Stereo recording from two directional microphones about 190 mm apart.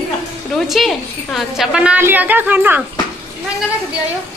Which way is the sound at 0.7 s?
Centre (ahead or behind).